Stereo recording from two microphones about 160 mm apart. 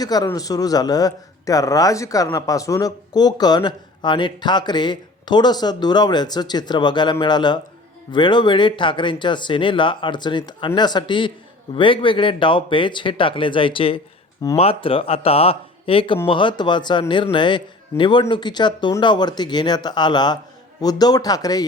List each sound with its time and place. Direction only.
0.0 s speech: 25° left (ahead or behind)